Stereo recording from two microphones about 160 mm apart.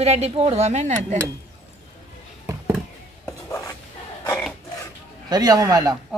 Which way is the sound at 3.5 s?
15° left (ahead or behind).